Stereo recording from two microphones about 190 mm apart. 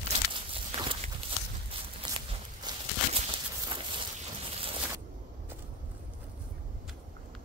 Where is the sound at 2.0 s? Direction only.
30° right (ahead or behind).